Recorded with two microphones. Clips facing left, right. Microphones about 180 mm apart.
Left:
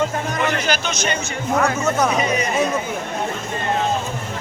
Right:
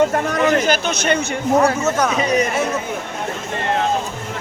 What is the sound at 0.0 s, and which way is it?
Speech, 60° right (ahead or behind).